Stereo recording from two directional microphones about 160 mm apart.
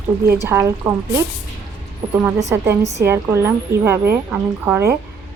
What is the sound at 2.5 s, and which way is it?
A woman's voice, 20° right (ahead or behind).